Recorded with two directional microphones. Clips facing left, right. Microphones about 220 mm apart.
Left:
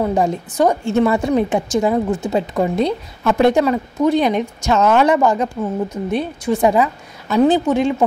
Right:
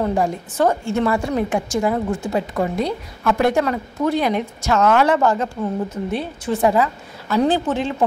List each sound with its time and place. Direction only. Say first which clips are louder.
0.0 s a woman's voice: left 3 dB; 15° left (ahead or behind)